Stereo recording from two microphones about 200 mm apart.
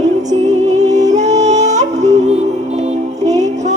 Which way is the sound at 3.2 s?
35° right (ahead or behind).